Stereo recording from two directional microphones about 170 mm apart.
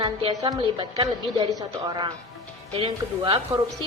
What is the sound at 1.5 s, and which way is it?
A woman's voice, 20° right (ahead or behind).